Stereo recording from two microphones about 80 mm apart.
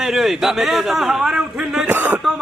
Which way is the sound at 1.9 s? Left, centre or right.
Right.